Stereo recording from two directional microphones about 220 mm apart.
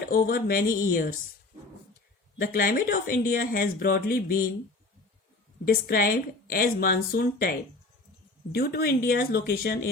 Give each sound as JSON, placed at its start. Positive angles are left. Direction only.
{"t": 0.1, "sound": "speech", "side_deg": 40}
{"t": 2.4, "sound": "speech", "side_deg": 40}
{"t": 5.6, "sound": "a woman's voice", "side_deg": 40}
{"t": 8.5, "sound": "a woman's voice", "side_deg": 45}